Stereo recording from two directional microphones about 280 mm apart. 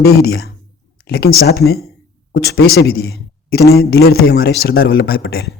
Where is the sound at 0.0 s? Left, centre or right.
Left.